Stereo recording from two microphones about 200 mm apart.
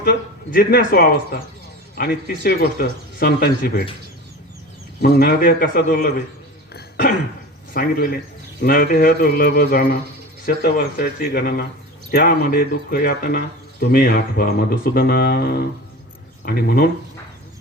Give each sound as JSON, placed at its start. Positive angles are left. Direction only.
{"t": 0.0, "sound": "speech", "side_deg": 50}
{"t": 5.0, "sound": "speech", "side_deg": 50}
{"t": 6.7, "sound": "throat clearing", "side_deg": 50}
{"t": 7.7, "sound": "speech", "side_deg": 50}